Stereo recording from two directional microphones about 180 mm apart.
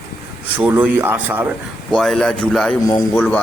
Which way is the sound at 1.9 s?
Centre (ahead or behind).